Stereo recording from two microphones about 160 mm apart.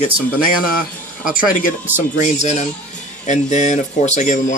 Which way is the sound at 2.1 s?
45° left (ahead or behind).